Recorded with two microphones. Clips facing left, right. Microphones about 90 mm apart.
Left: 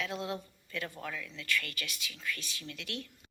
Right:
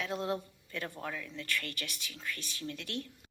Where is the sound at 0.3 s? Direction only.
20° right (ahead or behind).